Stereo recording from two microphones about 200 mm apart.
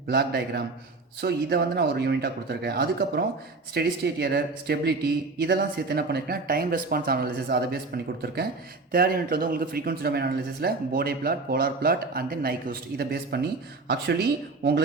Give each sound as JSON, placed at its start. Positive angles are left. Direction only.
{"t": 0.1, "sound": "a man's voice", "side_deg": -55}
{"t": 8.9, "sound": "speech", "side_deg": -45}